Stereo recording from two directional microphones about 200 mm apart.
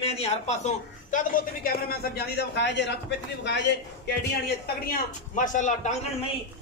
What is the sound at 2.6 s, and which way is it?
Speech, 60° left (ahead or behind).